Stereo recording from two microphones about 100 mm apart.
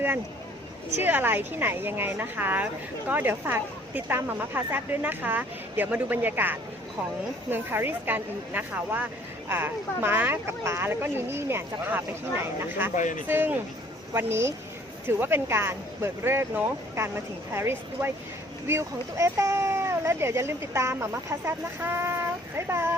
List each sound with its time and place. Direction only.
1.0 s speech: 20° right (ahead or behind)